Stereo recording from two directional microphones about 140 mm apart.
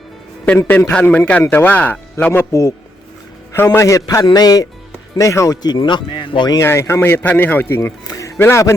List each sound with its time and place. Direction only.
0.4 s a man's voice: 10° left (ahead or behind); by 6.6 s 35° left (ahead or behind)
6.6 s a man's voice: 20° left (ahead or behind)